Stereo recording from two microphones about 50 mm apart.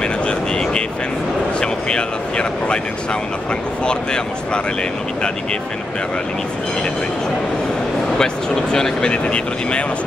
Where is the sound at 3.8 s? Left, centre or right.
Centre.